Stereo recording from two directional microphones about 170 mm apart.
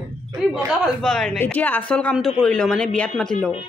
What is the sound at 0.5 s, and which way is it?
Speech, centre (ahead or behind).